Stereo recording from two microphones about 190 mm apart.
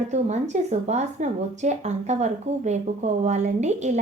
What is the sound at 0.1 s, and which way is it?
Speech, 35° right (ahead or behind).